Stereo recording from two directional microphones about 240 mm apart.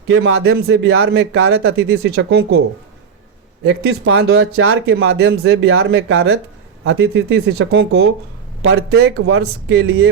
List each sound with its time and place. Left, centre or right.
0.1 s speech: right
3.6 s speech: right